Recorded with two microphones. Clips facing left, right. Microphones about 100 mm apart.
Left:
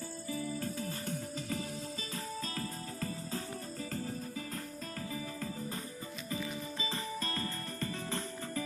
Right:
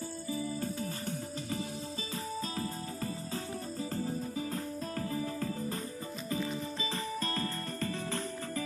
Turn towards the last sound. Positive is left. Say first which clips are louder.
# right 3 dB
turn(degrees=-25)  # may be behind; listen again after turning